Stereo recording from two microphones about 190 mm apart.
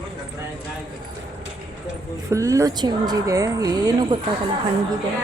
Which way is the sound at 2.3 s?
15° right (ahead or behind).